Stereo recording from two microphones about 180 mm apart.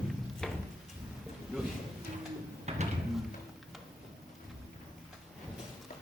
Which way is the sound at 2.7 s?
35° right (ahead or behind).